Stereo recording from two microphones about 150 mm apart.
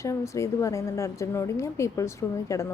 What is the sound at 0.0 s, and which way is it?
A woman's voice, 20° left (ahead or behind).